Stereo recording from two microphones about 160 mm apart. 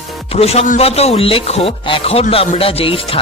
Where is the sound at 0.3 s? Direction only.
40° left (ahead or behind).